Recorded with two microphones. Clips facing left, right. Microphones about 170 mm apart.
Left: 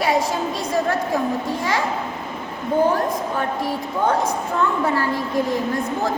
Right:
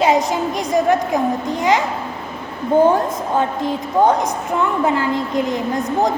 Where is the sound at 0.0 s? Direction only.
20° right (ahead or behind).